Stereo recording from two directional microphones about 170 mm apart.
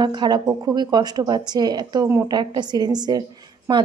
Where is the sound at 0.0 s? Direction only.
25° right (ahead or behind).